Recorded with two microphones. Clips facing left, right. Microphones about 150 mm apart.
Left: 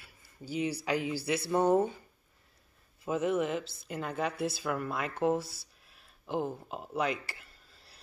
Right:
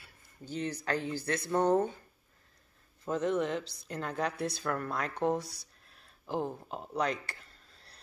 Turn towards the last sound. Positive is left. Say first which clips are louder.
# even
turn(degrees=5)  # may be behind; listen again after turning